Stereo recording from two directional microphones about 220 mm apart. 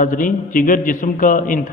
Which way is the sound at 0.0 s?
40° left (ahead or behind).